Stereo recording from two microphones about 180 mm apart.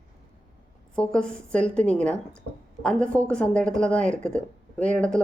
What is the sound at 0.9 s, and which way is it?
A woman's voice, 5° left (ahead or behind).